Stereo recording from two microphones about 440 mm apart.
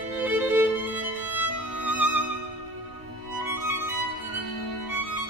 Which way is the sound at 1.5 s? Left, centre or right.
Left.